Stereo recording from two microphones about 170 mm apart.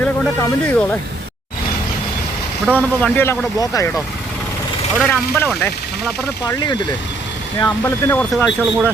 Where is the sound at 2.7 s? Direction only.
10° left (ahead or behind).